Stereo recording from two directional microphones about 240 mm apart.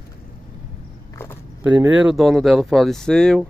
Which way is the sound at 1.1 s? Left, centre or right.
Centre.